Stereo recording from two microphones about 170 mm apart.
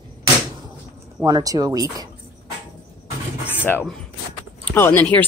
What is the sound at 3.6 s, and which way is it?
Speech, 10° left (ahead or behind).